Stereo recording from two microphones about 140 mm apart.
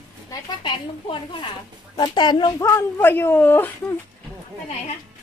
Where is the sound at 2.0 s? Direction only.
30° left (ahead or behind).